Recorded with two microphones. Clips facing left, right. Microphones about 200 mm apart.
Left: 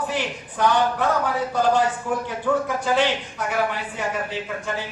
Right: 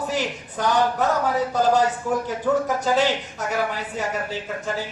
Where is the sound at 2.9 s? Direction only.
40° right (ahead or behind).